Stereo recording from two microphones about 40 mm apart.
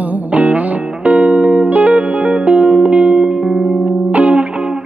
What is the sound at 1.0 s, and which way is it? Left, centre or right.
Music, right.